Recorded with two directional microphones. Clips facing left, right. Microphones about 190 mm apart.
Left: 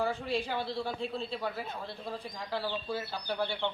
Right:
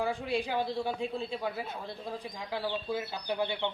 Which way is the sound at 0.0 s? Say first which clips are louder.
Right 1 dB; 15° right (ahead or behind).